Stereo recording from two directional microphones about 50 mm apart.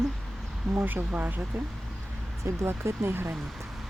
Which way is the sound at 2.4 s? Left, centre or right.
Right.